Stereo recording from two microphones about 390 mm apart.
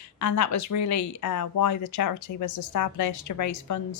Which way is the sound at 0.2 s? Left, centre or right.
Left.